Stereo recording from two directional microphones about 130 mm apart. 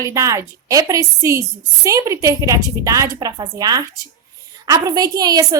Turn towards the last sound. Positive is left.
turn(degrees=-30)  # may be behind; listen again after turning